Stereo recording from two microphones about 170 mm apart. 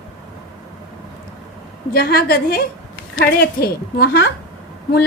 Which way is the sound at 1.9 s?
65° left (ahead or behind).